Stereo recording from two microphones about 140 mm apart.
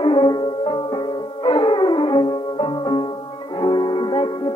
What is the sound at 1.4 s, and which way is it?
Music, 35° left (ahead or behind).